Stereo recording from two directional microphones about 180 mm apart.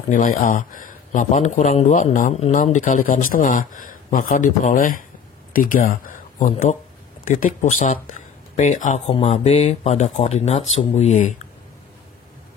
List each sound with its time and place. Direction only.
0.1 s speech: 50° left (ahead or behind)